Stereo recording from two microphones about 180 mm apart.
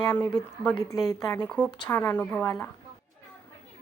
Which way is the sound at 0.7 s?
20° left (ahead or behind).